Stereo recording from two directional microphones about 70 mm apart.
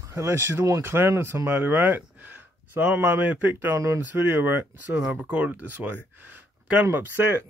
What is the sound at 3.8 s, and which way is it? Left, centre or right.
Speech, right.